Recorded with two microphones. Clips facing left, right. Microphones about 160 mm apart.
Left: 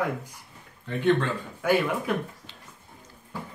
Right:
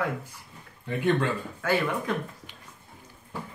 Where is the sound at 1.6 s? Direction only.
15° left (ahead or behind).